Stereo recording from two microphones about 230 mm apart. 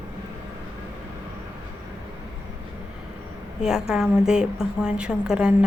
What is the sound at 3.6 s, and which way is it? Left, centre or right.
A woman's voice, centre.